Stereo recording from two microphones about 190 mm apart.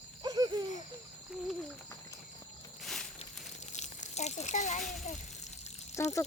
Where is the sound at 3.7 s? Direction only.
35° left (ahead or behind).